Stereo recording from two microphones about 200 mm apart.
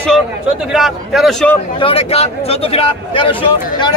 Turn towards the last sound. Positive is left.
turn(degrees=25)  # may be behind; listen again after turning